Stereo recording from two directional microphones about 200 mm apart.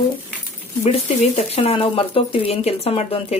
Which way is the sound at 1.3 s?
30° left (ahead or behind).